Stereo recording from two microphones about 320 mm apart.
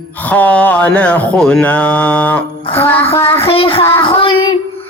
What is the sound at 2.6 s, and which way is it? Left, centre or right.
Music, centre.